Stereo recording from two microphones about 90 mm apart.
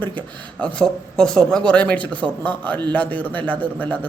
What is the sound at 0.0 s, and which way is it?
A man's voice, 15° left (ahead or behind).